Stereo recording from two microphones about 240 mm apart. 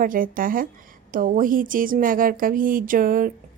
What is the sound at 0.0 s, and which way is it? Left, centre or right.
Speech, right.